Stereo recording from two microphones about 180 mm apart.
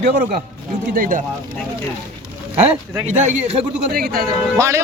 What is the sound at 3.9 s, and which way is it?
Speech, 55° right (ahead or behind).